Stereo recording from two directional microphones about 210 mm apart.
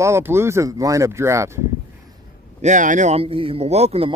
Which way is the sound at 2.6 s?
35° right (ahead or behind).